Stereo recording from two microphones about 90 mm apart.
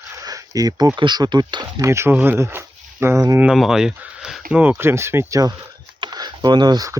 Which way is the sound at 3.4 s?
5° right (ahead or behind).